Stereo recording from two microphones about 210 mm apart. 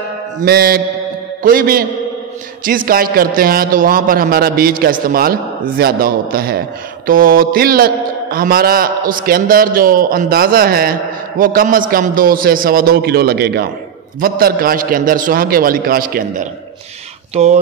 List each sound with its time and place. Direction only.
0.4 s a man's voice: 45° right (ahead or behind)
17.3 s speech: 30° right (ahead or behind)